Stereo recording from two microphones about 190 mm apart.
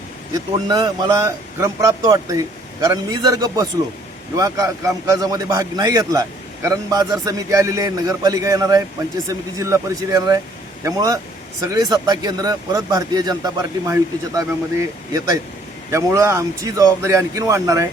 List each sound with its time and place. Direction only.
0.3 s a man's voice: 20° right (ahead or behind)